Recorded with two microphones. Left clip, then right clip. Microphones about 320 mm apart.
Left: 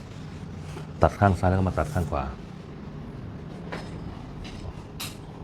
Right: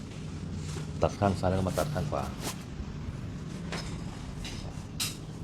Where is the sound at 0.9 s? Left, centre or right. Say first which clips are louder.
Left 6 dB; left.